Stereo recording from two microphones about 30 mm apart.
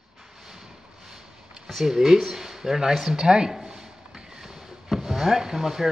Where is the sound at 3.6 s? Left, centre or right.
Right.